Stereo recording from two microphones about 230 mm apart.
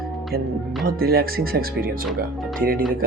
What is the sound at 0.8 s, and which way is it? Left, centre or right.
Speech, right.